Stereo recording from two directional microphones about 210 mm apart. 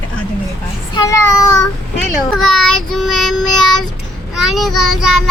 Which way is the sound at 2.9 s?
Centre (ahead or behind).